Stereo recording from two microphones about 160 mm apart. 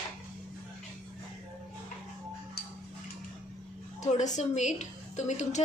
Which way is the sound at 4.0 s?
50° left (ahead or behind).